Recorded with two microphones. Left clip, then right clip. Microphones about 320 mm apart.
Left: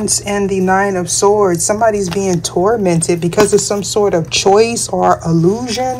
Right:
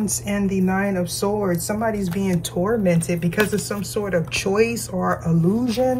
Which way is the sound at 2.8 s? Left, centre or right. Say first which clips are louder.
Left 7 dB; left.